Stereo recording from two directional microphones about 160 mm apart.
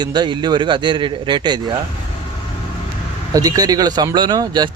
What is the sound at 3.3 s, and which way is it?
Speech, 20° right (ahead or behind).